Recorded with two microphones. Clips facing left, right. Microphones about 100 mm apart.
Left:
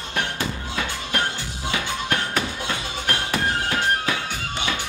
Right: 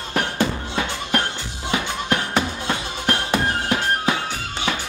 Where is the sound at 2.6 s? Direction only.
25° right (ahead or behind).